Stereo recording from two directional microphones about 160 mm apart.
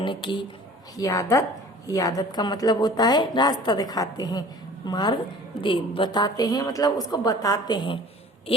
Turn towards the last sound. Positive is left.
turn(degrees=30)  # may be behind; listen again after turning